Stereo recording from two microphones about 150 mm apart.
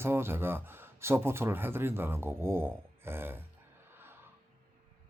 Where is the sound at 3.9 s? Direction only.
15° right (ahead or behind).